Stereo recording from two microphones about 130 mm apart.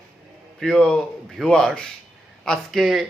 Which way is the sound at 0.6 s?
5° left (ahead or behind).